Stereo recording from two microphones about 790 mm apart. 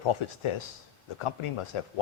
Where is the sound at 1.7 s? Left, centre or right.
Left.